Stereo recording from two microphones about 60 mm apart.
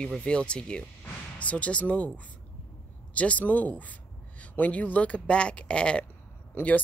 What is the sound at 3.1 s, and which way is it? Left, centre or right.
Speech, left.